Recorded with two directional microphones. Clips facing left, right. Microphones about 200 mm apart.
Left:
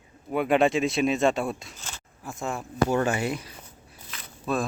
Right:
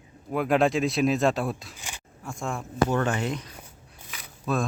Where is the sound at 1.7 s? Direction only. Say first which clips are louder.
Right 1 dB; 15° right (ahead or behind).